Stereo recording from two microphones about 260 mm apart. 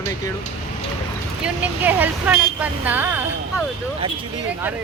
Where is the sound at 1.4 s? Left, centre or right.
Centre.